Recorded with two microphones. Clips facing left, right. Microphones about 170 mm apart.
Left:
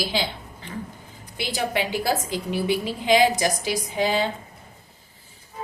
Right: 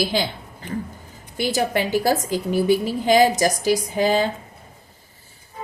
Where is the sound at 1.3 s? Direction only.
45° right (ahead or behind).